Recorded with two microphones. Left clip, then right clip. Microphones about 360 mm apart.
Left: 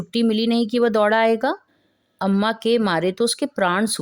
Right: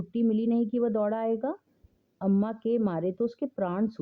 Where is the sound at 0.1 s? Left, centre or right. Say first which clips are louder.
Left 8 dB; left.